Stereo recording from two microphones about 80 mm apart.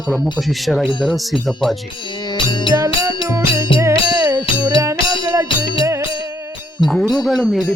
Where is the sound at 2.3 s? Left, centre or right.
Left.